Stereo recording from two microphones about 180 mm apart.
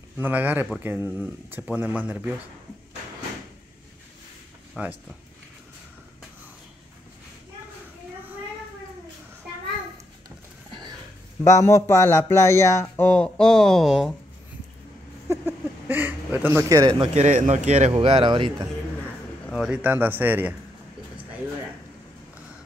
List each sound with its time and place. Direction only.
0.2 s speech: 10° right (ahead or behind)
4.8 s speech: 5° right (ahead or behind)
11.4 s speech: 15° left (ahead or behind); by 14.1 s centre (ahead or behind)
15.2 s a sound: 10° right (ahead or behind)
17.0 s speech: 40° right (ahead or behind)
19.5 s speech: 5° right (ahead or behind)